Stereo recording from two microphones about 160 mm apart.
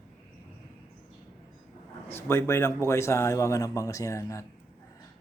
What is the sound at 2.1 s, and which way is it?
Speech, 15° left (ahead or behind).